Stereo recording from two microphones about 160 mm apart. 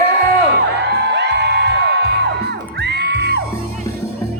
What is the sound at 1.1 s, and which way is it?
Music, 90° right.